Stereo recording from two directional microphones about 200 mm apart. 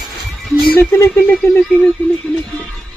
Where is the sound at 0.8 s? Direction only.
10° left (ahead or behind).